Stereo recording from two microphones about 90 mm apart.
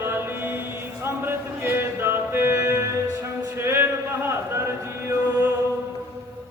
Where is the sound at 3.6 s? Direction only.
30° right (ahead or behind).